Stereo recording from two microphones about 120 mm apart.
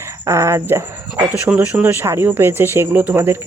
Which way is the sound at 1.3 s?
10° right (ahead or behind).